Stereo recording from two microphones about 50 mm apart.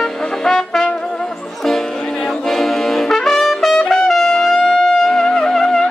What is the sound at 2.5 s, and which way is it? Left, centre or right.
Trumpet, centre.